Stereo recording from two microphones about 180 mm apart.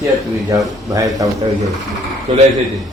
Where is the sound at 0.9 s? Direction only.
20° right (ahead or behind).